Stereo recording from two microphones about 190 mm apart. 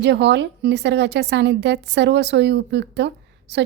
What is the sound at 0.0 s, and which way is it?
A woman's voice, 65° right (ahead or behind).